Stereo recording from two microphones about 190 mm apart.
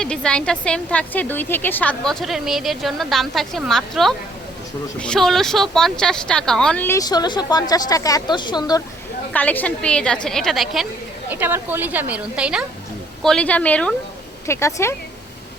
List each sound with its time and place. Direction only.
0.0 s a woman's voice: 5° left (ahead or behind); by 8.8 s 20° left (ahead or behind)
9.3 s a woman's voice: 10° left (ahead or behind)